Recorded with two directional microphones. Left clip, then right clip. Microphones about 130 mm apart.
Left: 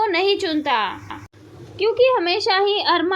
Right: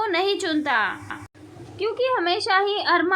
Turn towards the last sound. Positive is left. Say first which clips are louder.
# left 2 dB
turn(degrees=15)  # may be behind; listen again after turning